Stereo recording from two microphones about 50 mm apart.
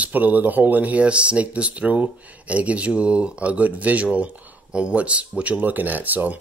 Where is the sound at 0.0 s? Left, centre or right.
Right.